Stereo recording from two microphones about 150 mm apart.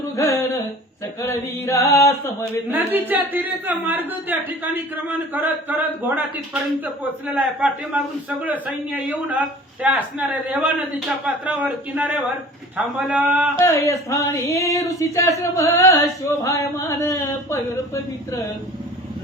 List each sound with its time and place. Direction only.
0.2 s a sound: 20° left (ahead or behind)
1.6 s speech: 20° left (ahead or behind)
2.7 s a man's voice: 10° right (ahead or behind)
13.6 s speech: 15° left (ahead or behind)